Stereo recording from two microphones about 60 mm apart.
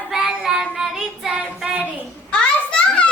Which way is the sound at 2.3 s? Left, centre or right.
Centre.